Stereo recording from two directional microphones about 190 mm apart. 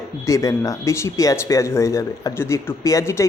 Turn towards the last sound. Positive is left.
turn(degrees=15)  # may be behind; listen again after turning